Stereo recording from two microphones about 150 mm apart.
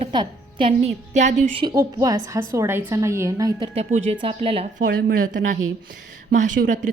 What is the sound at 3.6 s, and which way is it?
A woman's voice, 45° right (ahead or behind).